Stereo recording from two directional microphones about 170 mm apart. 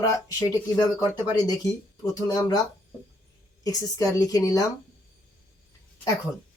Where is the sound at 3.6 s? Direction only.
20° left (ahead or behind).